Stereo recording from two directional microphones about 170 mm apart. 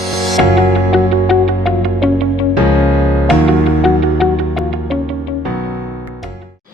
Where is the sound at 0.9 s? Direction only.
Centre (ahead or behind).